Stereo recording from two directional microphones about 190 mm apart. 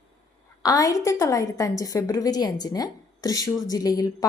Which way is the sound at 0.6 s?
20° left (ahead or behind).